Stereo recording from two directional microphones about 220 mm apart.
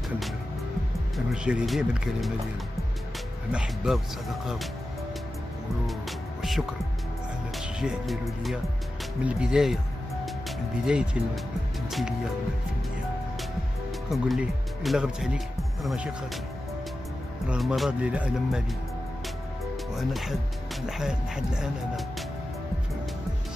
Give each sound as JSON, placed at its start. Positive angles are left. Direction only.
{"t": 1.1, "sound": "speech", "side_deg": -5}
{"t": 3.5, "sound": "speech", "side_deg": 0}
{"t": 6.4, "sound": "speech", "side_deg": 0}
{"t": 10.9, "sound": "speech", "side_deg": -5}
{"t": 14.1, "sound": "speech", "side_deg": 0}
{"t": 17.5, "sound": "speech", "side_deg": 0}
{"t": 20.0, "sound": "speech", "side_deg": 0}